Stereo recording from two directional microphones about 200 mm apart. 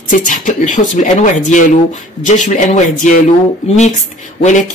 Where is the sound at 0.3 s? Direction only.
40° left (ahead or behind).